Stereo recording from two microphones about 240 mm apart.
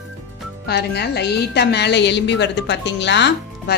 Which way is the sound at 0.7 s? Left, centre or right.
Left.